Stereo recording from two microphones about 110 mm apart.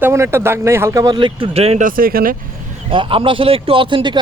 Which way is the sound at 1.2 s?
50° right (ahead or behind).